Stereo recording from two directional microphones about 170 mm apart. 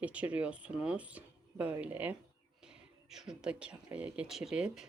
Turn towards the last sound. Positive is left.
turn(degrees=-5)  # may be behind; listen again after turning